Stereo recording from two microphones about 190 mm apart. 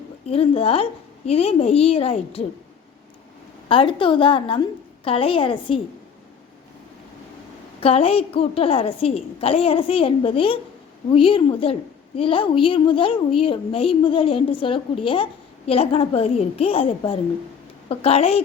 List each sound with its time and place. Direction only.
0.3 s a woman's voice: 30° left (ahead or behind)
3.7 s a woman's voice: 25° left (ahead or behind)
7.8 s a woman's voice: 30° left (ahead or behind)